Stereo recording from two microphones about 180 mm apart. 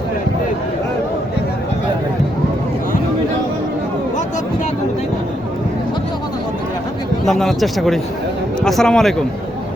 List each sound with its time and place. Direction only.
7.3 s speech: centre (ahead or behind)